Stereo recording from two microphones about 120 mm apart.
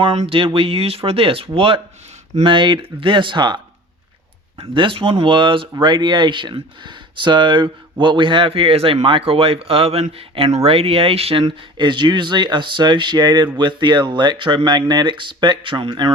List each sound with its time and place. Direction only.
0.2 s speech: 50° right (ahead or behind)
11.4 s speech: 40° right (ahead or behind)